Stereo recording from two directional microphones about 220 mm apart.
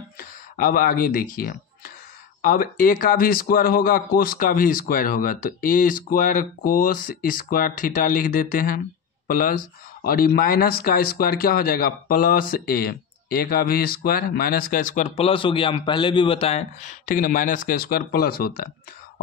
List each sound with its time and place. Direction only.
0.2 s speech: 40° left (ahead or behind)
10.0 s speech: 45° left (ahead or behind)